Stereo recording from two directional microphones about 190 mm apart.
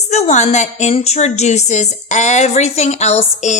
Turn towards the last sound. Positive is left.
turn(degrees=35)  # may be behind; listen again after turning